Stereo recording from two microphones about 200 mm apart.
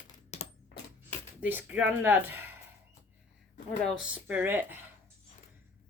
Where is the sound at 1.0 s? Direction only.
10° right (ahead or behind).